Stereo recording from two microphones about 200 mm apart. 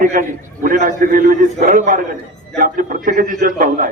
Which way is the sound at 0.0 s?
45° right (ahead or behind).